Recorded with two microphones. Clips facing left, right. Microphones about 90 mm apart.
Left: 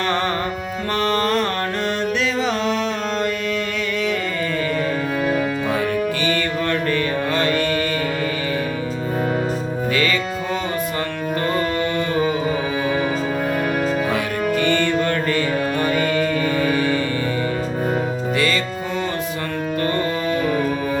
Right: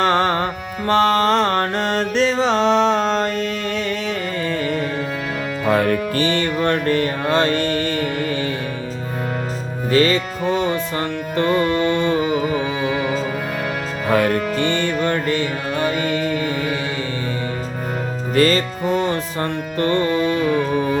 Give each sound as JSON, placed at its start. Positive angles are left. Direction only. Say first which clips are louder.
{"t": 0.0, "sound": "music", "louder": "right 4 dB", "side_deg": -35}
{"t": 5.6, "sound": "music", "louder": "right 4 dB", "side_deg": -55}
{"t": 6.1, "sound": "music", "louder": "right 2 dB", "side_deg": -30}
{"t": 9.9, "sound": "music", "louder": "right 6 dB", "side_deg": -35}
{"t": 11.4, "sound": "music", "louder": "right 4 dB", "side_deg": 40}
{"t": 11.8, "sound": "music", "louder": "right 3 dB", "side_deg": -25}
{"t": 14.1, "sound": "music", "louder": "right 6 dB", "side_deg": -45}
{"t": 14.5, "sound": "music", "louder": "left 2 dB", "side_deg": -25}
{"t": 18.3, "sound": "music", "louder": "right 8 dB", "side_deg": -40}
{"t": 19.8, "sound": "music", "louder": "right 5 dB", "side_deg": -30}
{"t": 20.1, "sound": "music", "louder": "right 3 dB", "side_deg": 35}